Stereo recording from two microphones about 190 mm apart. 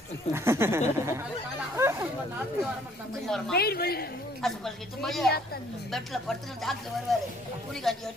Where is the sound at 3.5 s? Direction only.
55° left (ahead or behind).